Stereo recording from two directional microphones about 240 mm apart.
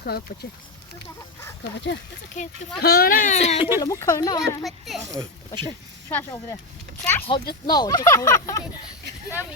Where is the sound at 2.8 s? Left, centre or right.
Left.